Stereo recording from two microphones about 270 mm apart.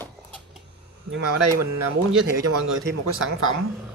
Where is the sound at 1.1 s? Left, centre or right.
Right.